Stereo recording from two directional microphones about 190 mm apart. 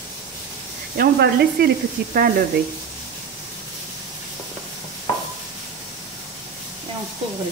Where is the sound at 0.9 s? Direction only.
55° right (ahead or behind).